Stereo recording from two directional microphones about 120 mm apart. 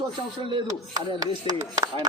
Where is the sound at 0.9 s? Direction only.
30° right (ahead or behind).